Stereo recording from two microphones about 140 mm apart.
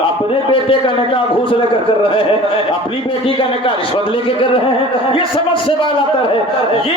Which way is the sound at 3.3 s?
40° left (ahead or behind).